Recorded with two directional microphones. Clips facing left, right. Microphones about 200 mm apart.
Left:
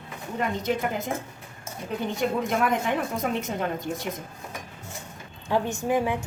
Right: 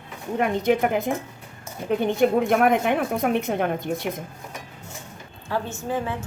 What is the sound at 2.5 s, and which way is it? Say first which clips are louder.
A woman's voice: right 5 dB; 60° right (ahead or behind).